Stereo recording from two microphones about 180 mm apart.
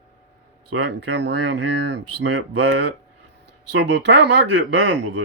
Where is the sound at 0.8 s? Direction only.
70° right (ahead or behind).